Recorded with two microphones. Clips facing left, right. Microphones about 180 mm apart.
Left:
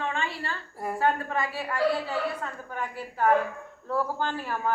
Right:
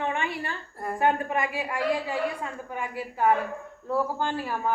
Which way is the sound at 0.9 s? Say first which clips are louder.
Right 2 dB; 15° right (ahead or behind).